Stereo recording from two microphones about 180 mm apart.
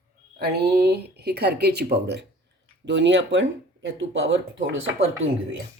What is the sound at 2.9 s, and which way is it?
Speech, 80° right.